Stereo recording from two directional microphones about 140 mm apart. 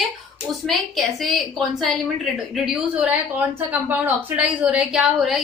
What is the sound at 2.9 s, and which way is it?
A woman's voice, 10° right (ahead or behind).